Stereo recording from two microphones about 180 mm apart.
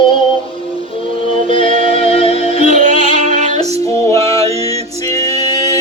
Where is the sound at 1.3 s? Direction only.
30° left (ahead or behind).